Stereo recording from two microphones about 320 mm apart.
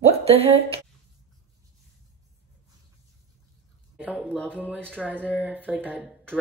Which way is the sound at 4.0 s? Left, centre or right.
Centre.